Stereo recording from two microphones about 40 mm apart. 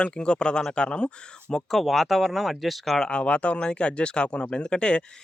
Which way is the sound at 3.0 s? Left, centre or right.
Left.